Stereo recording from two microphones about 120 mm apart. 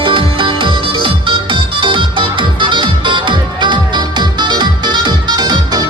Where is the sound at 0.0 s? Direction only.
45° right (ahead or behind).